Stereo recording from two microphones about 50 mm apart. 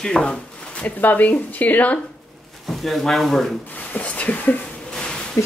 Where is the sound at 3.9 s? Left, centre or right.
Left.